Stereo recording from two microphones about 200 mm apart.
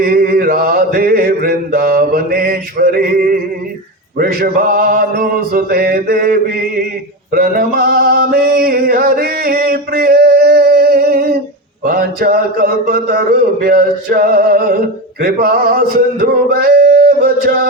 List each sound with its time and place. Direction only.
0.0 s mantra: 50° right (ahead or behind)
4.2 s a man's voice: 45° right (ahead or behind)
7.3 s male singing: 45° right (ahead or behind)
11.9 s a man's voice: 50° right (ahead or behind)